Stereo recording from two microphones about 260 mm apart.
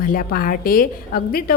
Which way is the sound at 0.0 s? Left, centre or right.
Left.